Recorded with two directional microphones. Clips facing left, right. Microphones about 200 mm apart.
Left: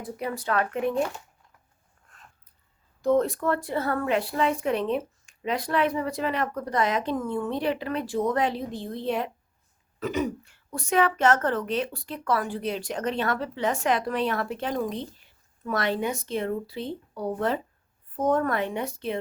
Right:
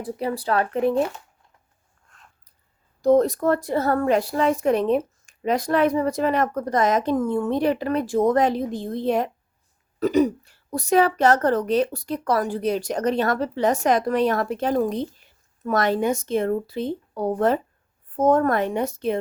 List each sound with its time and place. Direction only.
0.0 s a woman's voice: 30° right (ahead or behind)
3.0 s a woman's voice: 40° right (ahead or behind)